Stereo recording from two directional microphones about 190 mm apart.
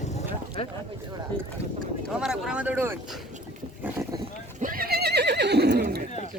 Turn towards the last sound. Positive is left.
turn(degrees=-60)  # may be behind; listen again after turning